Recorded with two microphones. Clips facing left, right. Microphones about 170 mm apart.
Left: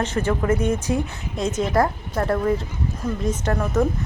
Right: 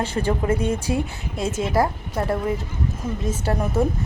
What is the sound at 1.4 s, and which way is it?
Speech, 5° right (ahead or behind).